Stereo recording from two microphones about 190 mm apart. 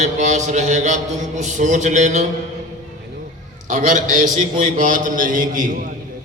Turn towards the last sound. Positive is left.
turn(degrees=-45)  # may be behind; listen again after turning